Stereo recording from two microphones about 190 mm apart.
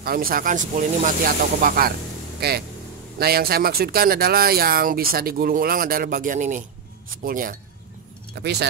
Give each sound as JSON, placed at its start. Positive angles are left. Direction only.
{"t": 0.0, "sound": "speech", "side_deg": -50}
{"t": 8.4, "sound": "speech", "side_deg": -60}